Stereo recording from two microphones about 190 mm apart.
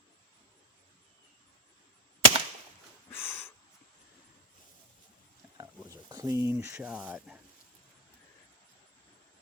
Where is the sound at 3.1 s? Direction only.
10° left (ahead or behind).